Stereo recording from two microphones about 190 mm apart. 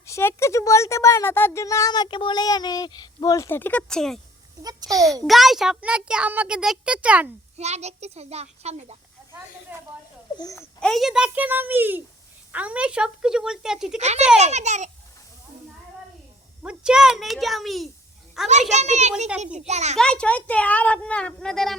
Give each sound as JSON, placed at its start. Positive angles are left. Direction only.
{"t": 0.0, "sound": "speech", "side_deg": 15}
{"t": 4.6, "sound": "a child's voice", "side_deg": -20}
{"t": 5.2, "sound": "a child's voice", "side_deg": 0}
{"t": 7.5, "sound": "a child's voice", "side_deg": -35}
{"t": 9.7, "sound": "a child's voice", "side_deg": -10}
{"t": 10.3, "sound": "speech", "side_deg": 20}
{"t": 10.8, "sound": "a child's voice", "side_deg": 0}
{"t": 14.0, "sound": "a child's voice", "side_deg": -35}
{"t": 16.6, "sound": "a child's voice", "side_deg": -5}
{"t": 18.7, "sound": "a child's voice", "side_deg": -35}
{"t": 20.0, "sound": "speech", "side_deg": 5}